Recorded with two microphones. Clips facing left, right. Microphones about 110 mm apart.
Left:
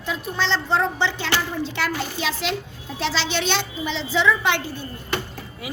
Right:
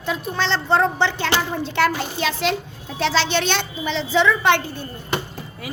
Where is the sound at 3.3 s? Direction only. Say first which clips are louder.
Right 2 dB; 50° right (ahead or behind).